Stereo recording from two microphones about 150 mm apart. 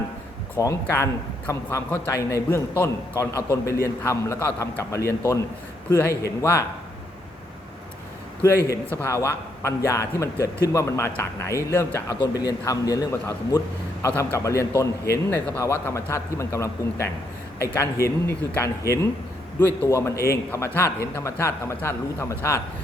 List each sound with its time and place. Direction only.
0.6 s a man's voice: 20° left (ahead or behind)
8.4 s a man's voice: 20° left (ahead or behind)
14.1 s a man's voice: 15° left (ahead or behind)